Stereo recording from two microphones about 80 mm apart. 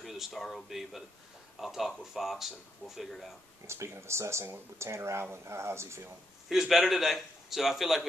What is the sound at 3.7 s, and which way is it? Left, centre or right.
Speech, right.